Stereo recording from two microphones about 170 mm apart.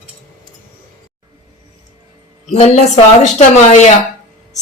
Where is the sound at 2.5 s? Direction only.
40° left (ahead or behind).